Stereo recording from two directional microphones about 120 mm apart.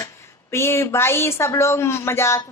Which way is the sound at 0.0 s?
20° left (ahead or behind).